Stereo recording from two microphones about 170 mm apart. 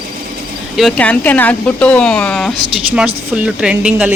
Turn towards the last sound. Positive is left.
turn(degrees=-10)  # may be behind; listen again after turning